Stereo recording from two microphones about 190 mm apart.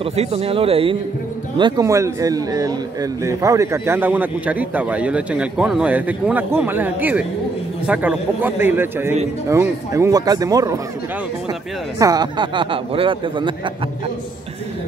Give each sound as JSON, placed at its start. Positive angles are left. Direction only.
{"t": 0.0, "sound": "speech", "side_deg": -35}
{"t": 1.6, "sound": "speech", "side_deg": -15}
{"t": 12.0, "sound": "speech", "side_deg": -20}